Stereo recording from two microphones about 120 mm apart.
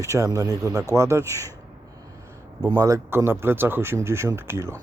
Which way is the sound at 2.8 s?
25° right (ahead or behind).